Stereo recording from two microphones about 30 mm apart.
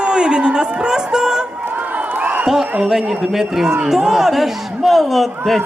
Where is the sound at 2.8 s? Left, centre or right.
Centre.